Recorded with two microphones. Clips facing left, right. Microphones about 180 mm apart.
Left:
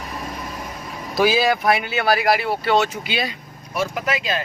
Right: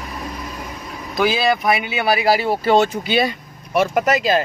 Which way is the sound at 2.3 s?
40° right (ahead or behind).